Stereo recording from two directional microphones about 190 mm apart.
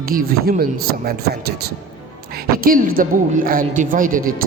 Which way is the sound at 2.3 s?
50° right (ahead or behind).